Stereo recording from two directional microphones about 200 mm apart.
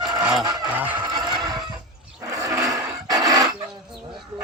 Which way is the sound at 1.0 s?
20° right (ahead or behind).